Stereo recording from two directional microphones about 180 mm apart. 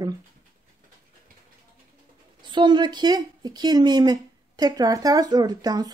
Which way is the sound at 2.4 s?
25° right (ahead or behind).